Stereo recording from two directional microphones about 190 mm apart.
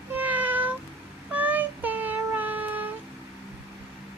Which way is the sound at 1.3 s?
10° right (ahead or behind).